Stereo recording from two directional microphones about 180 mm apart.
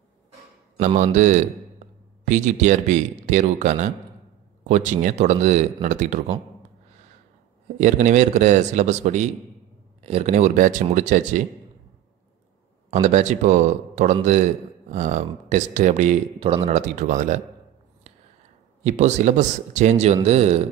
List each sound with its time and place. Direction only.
0.7 s a man's voice: 40° right (ahead or behind)
7.8 s a man's voice: 40° right (ahead or behind)
12.9 s a man's voice: 40° right (ahead or behind)
18.9 s a man's voice: 40° right (ahead or behind)